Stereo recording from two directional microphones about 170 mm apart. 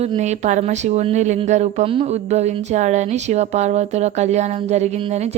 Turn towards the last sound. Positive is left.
turn(degrees=-40)  # may be behind; listen again after turning